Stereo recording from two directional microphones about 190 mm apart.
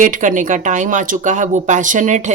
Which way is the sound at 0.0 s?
45° right (ahead or behind).